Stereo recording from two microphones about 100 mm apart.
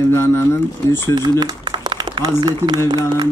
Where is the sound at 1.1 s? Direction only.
40° right (ahead or behind).